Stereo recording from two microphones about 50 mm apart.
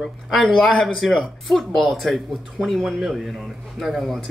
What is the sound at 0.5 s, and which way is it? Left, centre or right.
Speech, centre.